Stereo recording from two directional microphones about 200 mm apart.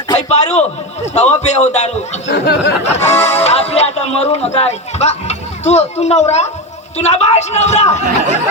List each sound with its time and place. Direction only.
0.2 s a man's voice: 35° left (ahead or behind)
2.3 s a sound: 60° left (ahead or behind)
2.8 s a man's voice: 35° left (ahead or behind)